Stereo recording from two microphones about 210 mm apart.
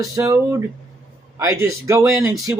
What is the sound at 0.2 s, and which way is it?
Speech, 15° right (ahead or behind).